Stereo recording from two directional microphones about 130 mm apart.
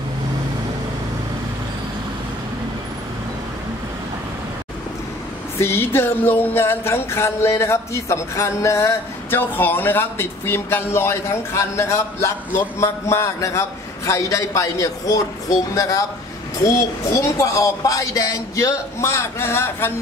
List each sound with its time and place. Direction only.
5.6 s music: 20° left (ahead or behind)